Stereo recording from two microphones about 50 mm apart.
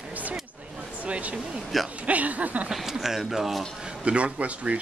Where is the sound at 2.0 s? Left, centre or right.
Right.